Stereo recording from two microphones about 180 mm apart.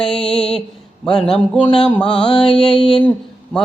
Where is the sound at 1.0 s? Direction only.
5° left (ahead or behind).